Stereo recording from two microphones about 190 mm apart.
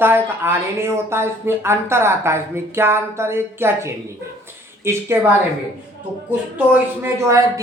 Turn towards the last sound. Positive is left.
turn(degrees=-15)  # may be behind; listen again after turning